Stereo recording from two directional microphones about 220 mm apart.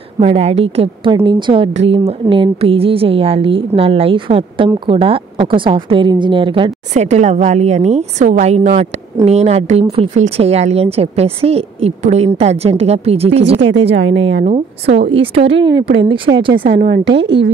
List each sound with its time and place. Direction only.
0.2 s speech: 30° right (ahead or behind)
13.6 s a woman's voice: 55° right (ahead or behind)
14.4 s speech: 30° right (ahead or behind)
16.6 s a woman's voice: 50° right (ahead or behind)